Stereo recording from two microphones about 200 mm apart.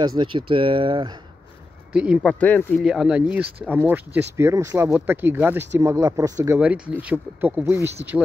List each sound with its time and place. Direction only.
0.2 s speech: 25° right (ahead or behind)
1.9 s speech: 5° right (ahead or behind)
2.2 s speech: 5° left (ahead or behind)
2.9 s speech: 5° right (ahead or behind)